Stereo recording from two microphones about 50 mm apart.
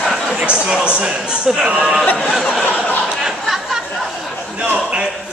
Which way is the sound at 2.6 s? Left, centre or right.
Left.